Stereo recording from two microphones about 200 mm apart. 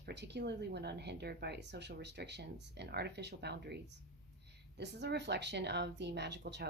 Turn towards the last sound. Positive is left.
turn(degrees=-60)  # may be behind; listen again after turning